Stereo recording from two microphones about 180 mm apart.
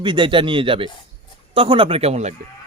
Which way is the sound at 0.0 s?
25° right (ahead or behind).